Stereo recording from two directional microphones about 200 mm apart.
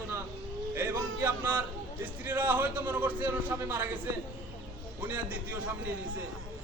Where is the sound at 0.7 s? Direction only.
10° right (ahead or behind).